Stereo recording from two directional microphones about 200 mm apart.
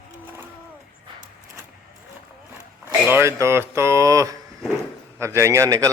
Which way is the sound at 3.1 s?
10° right (ahead or behind).